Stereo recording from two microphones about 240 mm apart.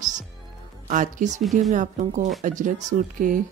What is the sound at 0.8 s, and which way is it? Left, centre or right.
Speech, right.